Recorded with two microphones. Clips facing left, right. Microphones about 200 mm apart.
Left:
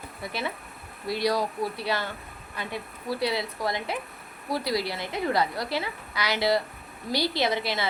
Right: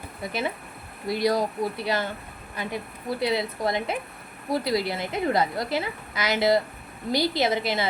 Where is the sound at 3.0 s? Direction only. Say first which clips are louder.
Right 2 dB; 20° right (ahead or behind).